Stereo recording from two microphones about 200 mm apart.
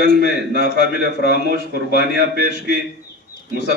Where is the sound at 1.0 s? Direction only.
55° left (ahead or behind).